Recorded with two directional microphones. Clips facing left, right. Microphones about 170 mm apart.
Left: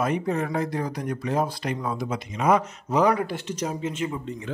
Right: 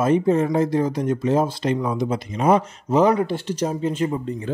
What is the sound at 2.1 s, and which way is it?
Speech, 30° right (ahead or behind).